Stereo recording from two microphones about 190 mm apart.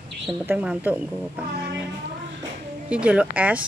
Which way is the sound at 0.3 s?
5° right (ahead or behind).